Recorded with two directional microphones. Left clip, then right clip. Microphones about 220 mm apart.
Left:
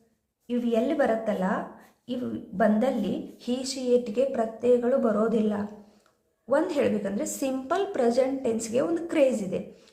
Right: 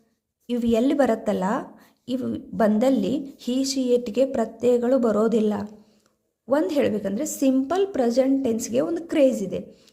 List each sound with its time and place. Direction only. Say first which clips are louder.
0.4 s a woman's voice: right 4 dB; 50° right (ahead or behind)